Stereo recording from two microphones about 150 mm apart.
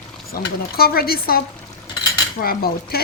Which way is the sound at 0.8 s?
90° left.